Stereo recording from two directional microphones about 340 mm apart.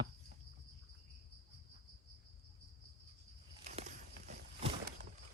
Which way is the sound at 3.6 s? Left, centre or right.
Right.